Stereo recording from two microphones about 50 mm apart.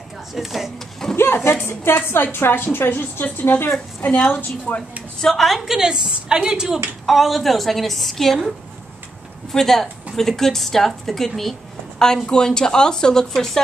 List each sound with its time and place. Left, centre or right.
0.3 s a woman's voice: centre
1.1 s a woman's voice: left
4.0 s a woman's voice: left
5.2 s a woman's voice: centre
7.1 s a woman's voice: centre
9.5 s a woman's voice: centre